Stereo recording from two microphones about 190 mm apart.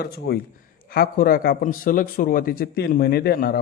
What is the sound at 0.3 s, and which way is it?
A man's voice, 55° left (ahead or behind).